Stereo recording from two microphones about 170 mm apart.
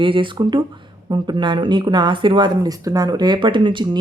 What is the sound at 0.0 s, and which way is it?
Speech, 30° right (ahead or behind).